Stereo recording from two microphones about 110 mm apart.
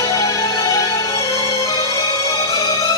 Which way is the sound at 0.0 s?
40° left (ahead or behind).